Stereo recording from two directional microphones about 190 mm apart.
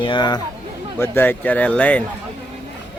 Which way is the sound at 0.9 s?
10° left (ahead or behind).